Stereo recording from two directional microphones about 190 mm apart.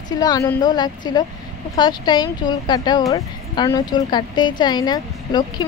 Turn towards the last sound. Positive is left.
turn(degrees=20)  # may be behind; listen again after turning